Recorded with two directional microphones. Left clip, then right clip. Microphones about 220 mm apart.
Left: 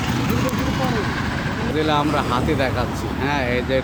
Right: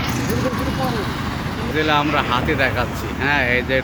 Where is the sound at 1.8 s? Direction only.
5° left (ahead or behind).